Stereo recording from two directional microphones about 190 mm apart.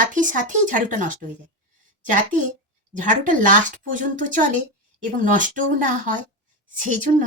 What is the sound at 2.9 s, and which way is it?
Speech, 40° right (ahead or behind).